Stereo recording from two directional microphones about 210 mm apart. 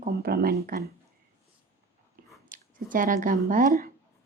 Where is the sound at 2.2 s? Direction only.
40° right (ahead or behind).